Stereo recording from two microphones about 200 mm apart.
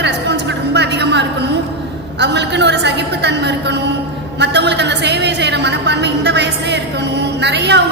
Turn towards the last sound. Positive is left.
turn(degrees=-60)  # may be behind; listen again after turning